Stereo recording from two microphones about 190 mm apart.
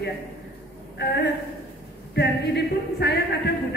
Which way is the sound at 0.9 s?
60° left (ahead or behind).